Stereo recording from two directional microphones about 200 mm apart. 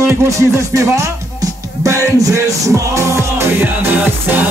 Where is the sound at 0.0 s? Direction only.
15° right (ahead or behind).